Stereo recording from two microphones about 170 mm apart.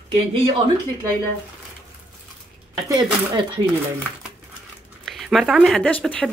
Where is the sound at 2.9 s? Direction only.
25° right (ahead or behind).